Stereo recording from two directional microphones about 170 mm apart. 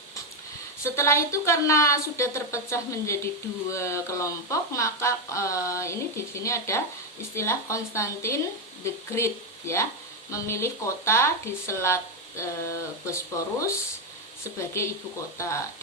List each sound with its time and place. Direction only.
0.9 s a woman's voice: 15° left (ahead or behind)
14.8 s a woman's voice: 15° left (ahead or behind)